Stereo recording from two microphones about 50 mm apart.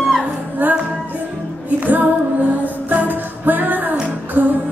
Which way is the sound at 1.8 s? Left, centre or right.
Right.